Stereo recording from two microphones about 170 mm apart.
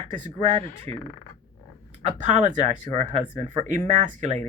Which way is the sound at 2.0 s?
45° right (ahead or behind).